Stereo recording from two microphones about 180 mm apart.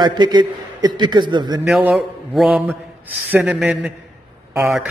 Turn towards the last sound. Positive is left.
turn(degrees=-5)  # may be behind; listen again after turning